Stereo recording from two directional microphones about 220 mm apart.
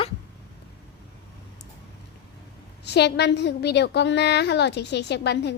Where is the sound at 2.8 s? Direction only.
50° left (ahead or behind).